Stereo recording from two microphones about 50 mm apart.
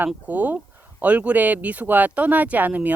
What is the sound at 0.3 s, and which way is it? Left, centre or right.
Speech, right.